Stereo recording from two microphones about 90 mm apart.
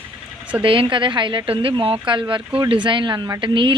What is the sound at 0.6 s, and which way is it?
Speech, 75° right (ahead or behind).